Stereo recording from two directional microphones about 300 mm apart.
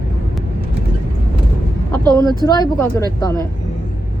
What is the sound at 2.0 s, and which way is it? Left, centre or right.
Speech, centre.